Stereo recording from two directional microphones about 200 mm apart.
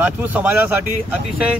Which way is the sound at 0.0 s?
10° right (ahead or behind).